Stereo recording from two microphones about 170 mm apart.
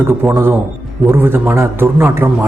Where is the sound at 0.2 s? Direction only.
15° right (ahead or behind).